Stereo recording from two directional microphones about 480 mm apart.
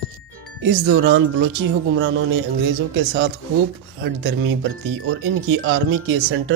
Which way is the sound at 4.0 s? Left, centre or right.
Right.